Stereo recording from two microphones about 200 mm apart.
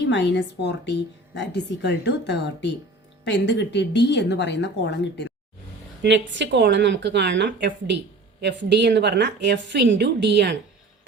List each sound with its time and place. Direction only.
0.0 s a woman's voice: 65° left (ahead or behind)
6.0 s a woman's voice: 60° right (ahead or behind)